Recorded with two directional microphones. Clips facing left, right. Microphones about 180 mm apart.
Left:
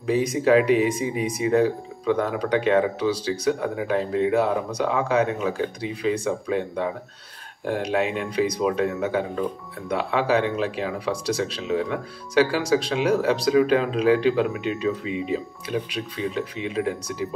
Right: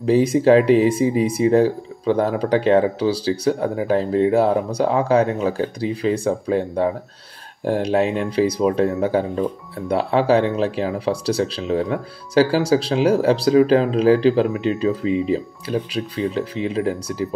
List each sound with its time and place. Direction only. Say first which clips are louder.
0.0 s speech: right 6 dB; 30° right (ahead or behind)